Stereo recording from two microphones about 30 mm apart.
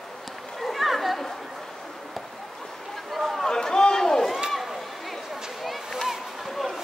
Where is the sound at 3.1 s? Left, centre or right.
Centre.